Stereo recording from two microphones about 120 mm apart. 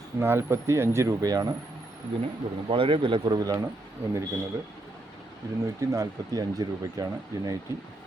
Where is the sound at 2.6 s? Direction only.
45° right (ahead or behind); by 3.7 s 30° right (ahead or behind).